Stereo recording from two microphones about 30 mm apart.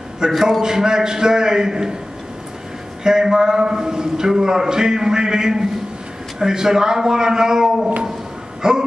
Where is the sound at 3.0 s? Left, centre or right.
Right.